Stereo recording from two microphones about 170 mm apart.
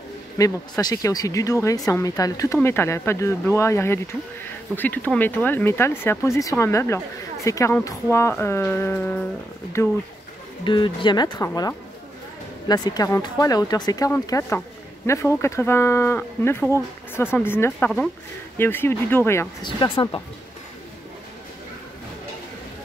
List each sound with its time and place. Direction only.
0.4 s speech: 20° left (ahead or behind)
10.6 s speech: 30° left (ahead or behind)
19.6 s speech: 30° left (ahead or behind)